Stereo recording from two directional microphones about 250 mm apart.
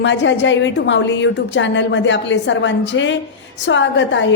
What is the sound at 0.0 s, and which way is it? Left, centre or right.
A woman's voice, left.